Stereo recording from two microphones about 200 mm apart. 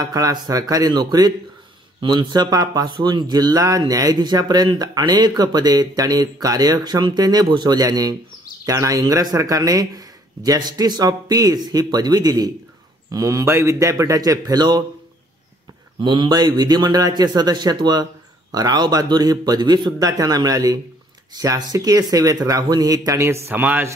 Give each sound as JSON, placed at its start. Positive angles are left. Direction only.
{"t": 0.0, "sound": "speech", "side_deg": -20}
{"t": 16.0, "sound": "speech", "side_deg": -20}